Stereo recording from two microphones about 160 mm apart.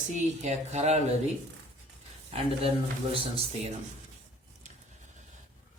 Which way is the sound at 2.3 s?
40° right (ahead or behind).